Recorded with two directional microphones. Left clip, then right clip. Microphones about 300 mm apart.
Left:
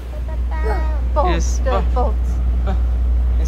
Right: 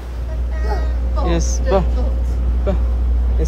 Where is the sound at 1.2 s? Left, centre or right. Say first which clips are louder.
Even; centre.